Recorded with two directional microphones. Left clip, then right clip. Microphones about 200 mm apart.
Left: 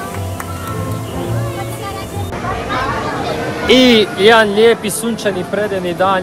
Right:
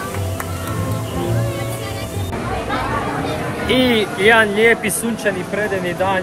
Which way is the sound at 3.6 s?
40° left (ahead or behind).